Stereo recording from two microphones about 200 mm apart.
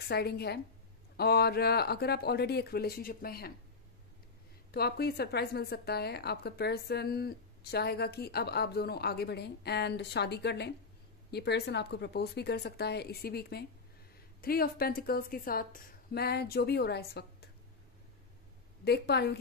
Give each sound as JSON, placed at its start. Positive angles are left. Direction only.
{"t": 0.1, "sound": "a woman's voice", "side_deg": 55}
{"t": 4.6, "sound": "a woman's voice", "side_deg": 50}
{"t": 18.9, "sound": "a woman's voice", "side_deg": 55}